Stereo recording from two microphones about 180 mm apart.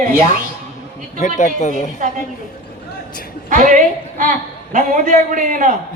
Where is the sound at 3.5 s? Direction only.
45° right (ahead or behind).